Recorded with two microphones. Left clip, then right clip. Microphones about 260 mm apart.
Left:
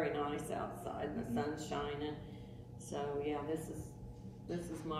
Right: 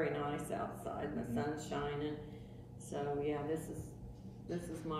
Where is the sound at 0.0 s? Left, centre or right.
Centre.